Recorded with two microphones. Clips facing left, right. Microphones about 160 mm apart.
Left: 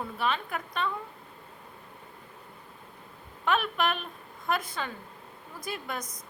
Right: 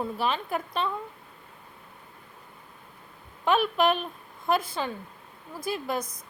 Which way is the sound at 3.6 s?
Centre (ahead or behind).